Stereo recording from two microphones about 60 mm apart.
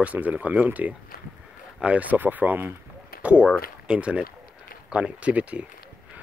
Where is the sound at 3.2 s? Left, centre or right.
Centre.